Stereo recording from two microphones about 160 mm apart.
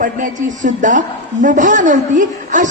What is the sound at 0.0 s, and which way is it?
A woman's voice, 55° right (ahead or behind).